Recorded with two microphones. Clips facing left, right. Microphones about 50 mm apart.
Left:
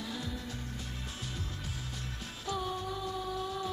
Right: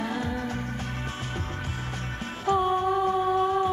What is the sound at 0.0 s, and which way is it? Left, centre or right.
Music, right.